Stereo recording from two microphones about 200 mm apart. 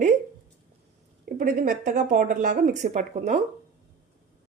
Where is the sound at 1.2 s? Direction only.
45° right (ahead or behind).